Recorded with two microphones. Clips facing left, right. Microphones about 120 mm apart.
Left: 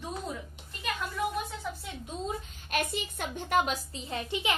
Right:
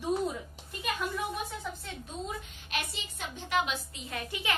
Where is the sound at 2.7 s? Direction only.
50° left (ahead or behind).